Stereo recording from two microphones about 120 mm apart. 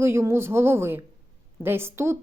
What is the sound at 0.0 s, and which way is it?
A woman's voice, 20° right (ahead or behind).